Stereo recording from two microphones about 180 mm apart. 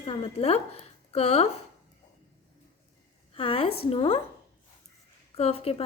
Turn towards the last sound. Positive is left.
turn(degrees=35)  # may be behind; listen again after turning